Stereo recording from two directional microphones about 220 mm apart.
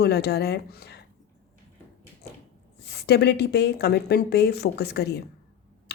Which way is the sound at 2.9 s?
50° left (ahead or behind).